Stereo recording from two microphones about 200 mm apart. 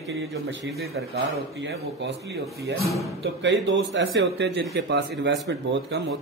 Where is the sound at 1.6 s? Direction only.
60° right (ahead or behind).